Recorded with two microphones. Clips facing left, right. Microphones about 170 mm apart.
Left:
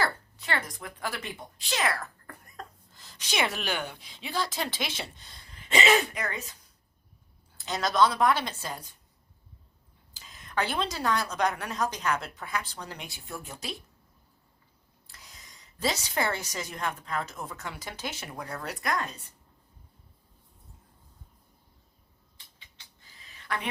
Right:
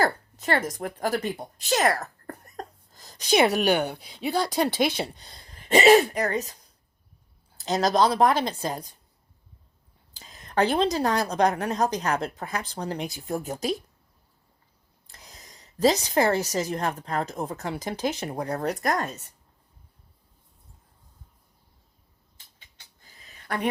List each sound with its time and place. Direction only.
0.0 s speech: 45° right (ahead or behind)
3.7 s speech: 65° right (ahead or behind)
3.9 s a woman's voice: 40° right (ahead or behind)
7.6 s a woman's voice: 40° right (ahead or behind)
10.2 s a woman's voice: 35° right (ahead or behind)
15.1 s a woman's voice: 40° right (ahead or behind)
22.4 s a sound: 45° right (ahead or behind)